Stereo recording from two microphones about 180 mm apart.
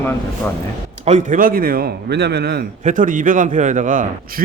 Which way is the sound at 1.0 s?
40° right (ahead or behind).